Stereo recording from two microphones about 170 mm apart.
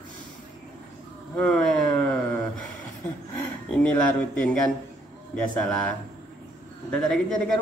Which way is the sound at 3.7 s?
5° left (ahead or behind).